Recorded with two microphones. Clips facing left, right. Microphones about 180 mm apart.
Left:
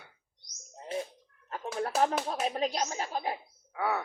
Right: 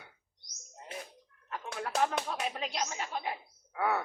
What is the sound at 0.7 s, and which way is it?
Bird, 30° left (ahead or behind).